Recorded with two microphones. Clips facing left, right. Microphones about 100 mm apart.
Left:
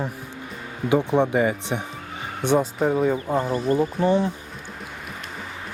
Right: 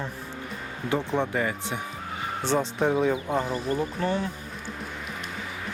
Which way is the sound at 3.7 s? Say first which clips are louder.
Left 8 dB; 20° left (ahead or behind).